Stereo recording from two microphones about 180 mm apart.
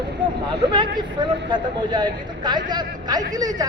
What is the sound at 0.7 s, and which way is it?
Speech, 25° right (ahead or behind).